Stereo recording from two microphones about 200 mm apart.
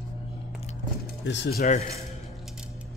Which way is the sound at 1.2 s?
60° left (ahead or behind).